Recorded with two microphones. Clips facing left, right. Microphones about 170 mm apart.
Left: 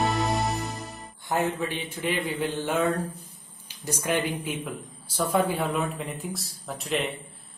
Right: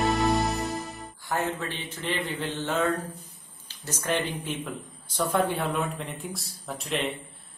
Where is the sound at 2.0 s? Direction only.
10° left (ahead or behind).